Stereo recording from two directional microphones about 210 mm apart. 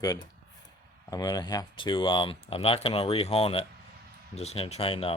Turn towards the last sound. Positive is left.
turn(degrees=25)  # may be behind; listen again after turning